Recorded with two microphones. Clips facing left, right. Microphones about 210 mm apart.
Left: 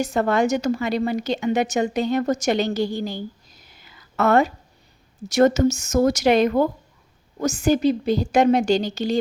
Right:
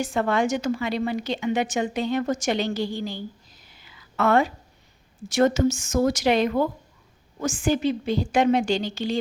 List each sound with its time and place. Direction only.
0.0 s a woman's voice: 40° left (ahead or behind)
3.8 s a sound: 45° left (ahead or behind)
5.3 s a woman's voice: 45° left (ahead or behind)